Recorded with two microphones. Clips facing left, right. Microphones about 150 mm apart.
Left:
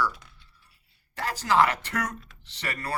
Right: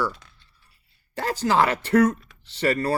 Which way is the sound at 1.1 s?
25° right (ahead or behind).